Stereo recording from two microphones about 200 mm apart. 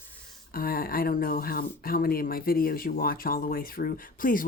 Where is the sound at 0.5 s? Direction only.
45° left (ahead or behind).